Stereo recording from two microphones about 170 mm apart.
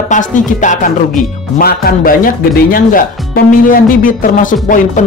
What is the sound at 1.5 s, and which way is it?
Speech, 60° left (ahead or behind).